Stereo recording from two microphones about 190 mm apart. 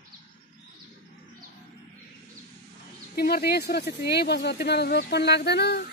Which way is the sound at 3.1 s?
55° left (ahead or behind).